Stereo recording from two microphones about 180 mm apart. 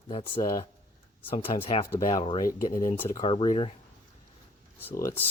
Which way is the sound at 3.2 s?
30° left (ahead or behind).